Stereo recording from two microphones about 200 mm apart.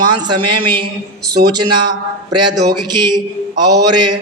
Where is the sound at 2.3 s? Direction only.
20° right (ahead or behind).